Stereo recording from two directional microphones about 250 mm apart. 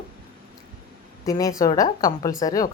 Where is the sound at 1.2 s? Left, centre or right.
Centre.